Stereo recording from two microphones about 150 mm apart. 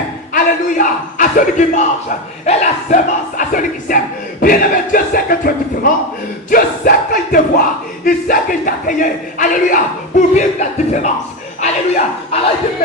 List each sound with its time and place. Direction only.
0.3 s speech: 65° left (ahead or behind)
6.5 s crowd: 70° left (ahead or behind)
8.0 s speech: 65° left (ahead or behind); by 12.4 s 50° left (ahead or behind)